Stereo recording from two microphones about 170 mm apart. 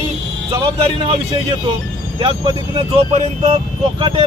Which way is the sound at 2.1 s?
30° right (ahead or behind).